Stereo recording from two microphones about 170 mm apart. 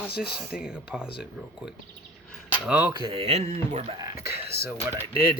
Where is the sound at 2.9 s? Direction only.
30° right (ahead or behind).